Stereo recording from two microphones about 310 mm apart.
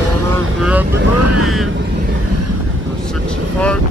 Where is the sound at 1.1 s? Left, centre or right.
Right.